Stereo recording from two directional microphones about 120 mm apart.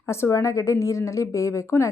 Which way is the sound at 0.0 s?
25° left (ahead or behind).